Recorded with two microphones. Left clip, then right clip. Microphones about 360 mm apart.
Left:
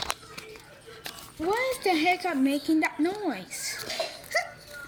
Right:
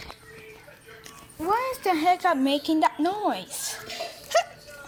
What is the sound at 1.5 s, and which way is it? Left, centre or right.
A woman's voice, centre.